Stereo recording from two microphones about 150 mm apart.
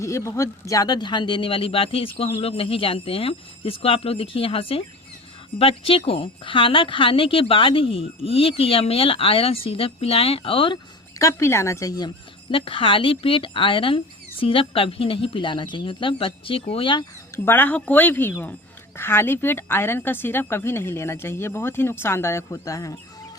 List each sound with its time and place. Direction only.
0.0 s speech: 20° left (ahead or behind); by 10.8 s 35° left (ahead or behind)
11.2 s speech: 20° left (ahead or behind)
17.3 s speech: 15° left (ahead or behind)